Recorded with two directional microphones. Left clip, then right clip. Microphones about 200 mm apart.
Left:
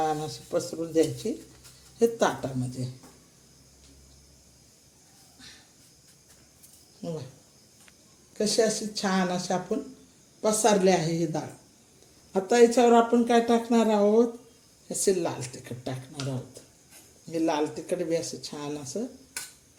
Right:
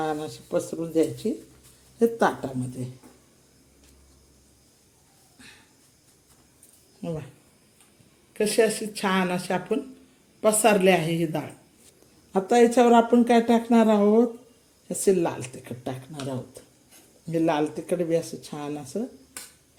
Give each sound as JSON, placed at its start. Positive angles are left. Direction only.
{"t": 0.0, "sound": "a man's voice", "side_deg": -10}
{"t": 8.4, "sound": "speech", "side_deg": -5}
{"t": 17.2, "sound": "speech", "side_deg": -15}